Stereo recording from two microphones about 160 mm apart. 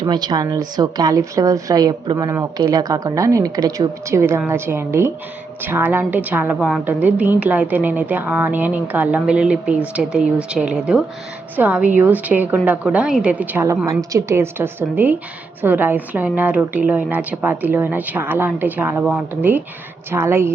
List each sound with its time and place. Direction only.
0.0 s a woman's voice: 25° right (ahead or behind)